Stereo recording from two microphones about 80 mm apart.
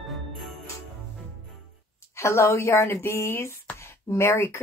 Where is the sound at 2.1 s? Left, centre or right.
Left.